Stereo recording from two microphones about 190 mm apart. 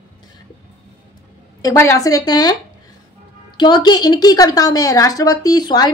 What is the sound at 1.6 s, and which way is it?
Speech, 15° left (ahead or behind).